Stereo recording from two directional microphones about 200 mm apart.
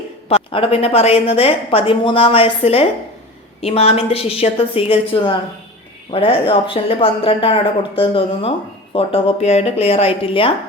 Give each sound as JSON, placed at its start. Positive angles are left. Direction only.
{"t": 0.3, "sound": "speech", "side_deg": 30}